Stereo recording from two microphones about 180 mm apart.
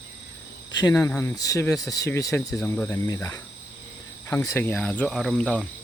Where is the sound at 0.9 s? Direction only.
5° left (ahead or behind).